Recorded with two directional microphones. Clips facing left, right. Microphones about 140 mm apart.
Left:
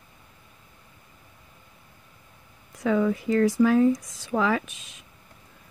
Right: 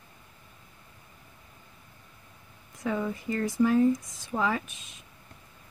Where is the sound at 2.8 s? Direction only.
90° left.